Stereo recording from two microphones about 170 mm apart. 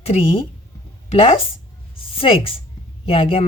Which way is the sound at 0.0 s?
35° left (ahead or behind).